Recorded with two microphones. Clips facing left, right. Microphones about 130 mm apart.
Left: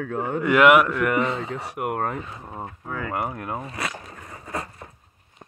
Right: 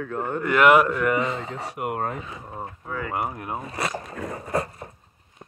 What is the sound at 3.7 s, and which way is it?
Speech, 35° right (ahead or behind).